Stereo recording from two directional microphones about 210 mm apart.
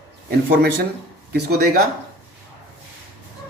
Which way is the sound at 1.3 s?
50° right (ahead or behind).